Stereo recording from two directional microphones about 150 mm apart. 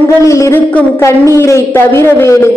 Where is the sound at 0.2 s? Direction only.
20° left (ahead or behind).